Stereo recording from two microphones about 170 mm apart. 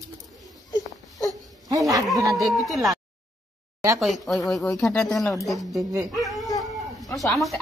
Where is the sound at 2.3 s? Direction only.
Centre (ahead or behind).